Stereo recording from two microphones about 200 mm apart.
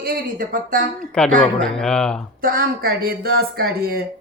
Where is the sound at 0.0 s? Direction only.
45° right (ahead or behind).